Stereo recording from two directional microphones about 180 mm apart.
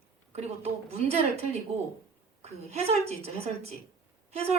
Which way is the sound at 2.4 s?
35° right (ahead or behind).